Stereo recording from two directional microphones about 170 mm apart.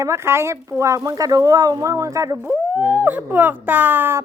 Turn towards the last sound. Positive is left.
turn(degrees=-10)  # may be behind; listen again after turning